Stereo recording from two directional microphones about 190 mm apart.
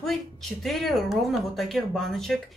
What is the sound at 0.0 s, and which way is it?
Speech, centre (ahead or behind).